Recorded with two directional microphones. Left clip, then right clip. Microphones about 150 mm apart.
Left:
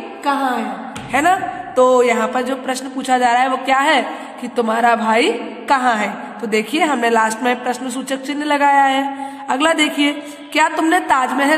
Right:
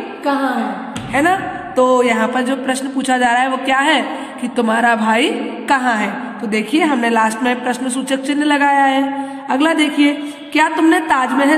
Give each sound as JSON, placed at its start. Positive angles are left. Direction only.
{"t": 0.3, "sound": "a woman's voice", "side_deg": 70}
{"t": 1.1, "sound": "a woman's voice", "side_deg": 40}
{"t": 1.8, "sound": "a woman's voice", "side_deg": 25}